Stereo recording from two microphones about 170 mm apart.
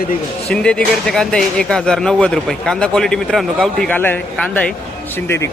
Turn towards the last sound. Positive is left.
turn(degrees=15)  # may be behind; listen again after turning